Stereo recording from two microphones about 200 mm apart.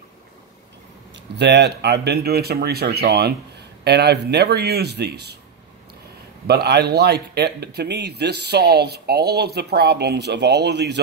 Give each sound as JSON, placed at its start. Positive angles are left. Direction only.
{"t": 1.1, "sound": "speech", "side_deg": -60}
{"t": 6.4, "sound": "speech", "side_deg": -55}